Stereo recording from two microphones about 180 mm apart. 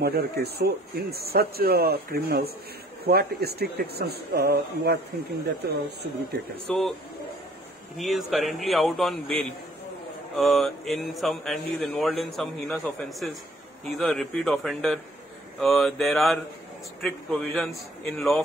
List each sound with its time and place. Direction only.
0.0 s speech: 60° right (ahead or behind)
6.7 s speech: centre (ahead or behind)
8.0 s speech: centre (ahead or behind)